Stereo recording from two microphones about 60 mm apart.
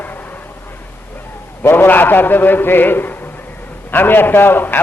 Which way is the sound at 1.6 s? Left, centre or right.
Left.